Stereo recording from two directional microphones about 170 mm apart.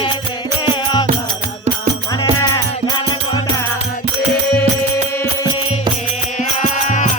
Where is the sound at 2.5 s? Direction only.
25° left (ahead or behind).